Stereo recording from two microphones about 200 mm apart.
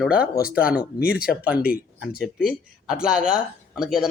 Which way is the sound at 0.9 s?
50° left (ahead or behind).